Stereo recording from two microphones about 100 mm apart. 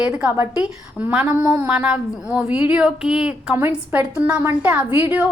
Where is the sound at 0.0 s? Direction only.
15° right (ahead or behind).